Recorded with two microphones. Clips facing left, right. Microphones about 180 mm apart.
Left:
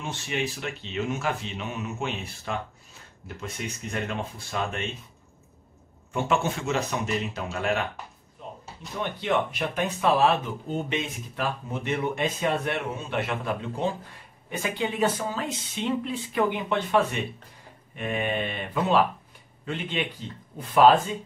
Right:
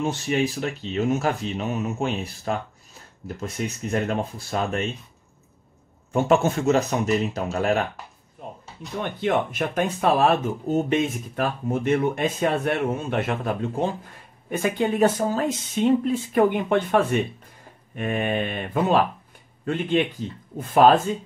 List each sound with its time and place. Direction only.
0.0 s speech: 40° right (ahead or behind)
6.1 s speech: 40° right (ahead or behind)
9.0 s speech: 50° right (ahead or behind)